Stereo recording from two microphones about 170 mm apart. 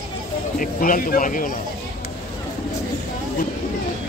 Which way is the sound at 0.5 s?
55° left (ahead or behind).